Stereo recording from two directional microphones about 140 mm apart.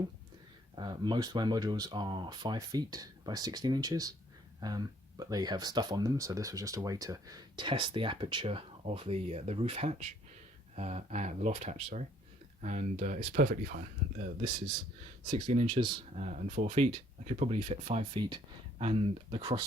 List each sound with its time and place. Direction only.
0.8 s speech: 30° right (ahead or behind); by 13.7 s 75° right (ahead or behind)
15.3 s speech: 35° right (ahead or behind)
16.1 s speech: 55° right (ahead or behind); by 19.5 s 35° right (ahead or behind)